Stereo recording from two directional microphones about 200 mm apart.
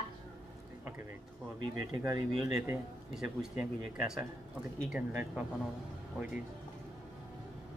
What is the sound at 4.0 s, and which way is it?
Speech, 5° right (ahead or behind).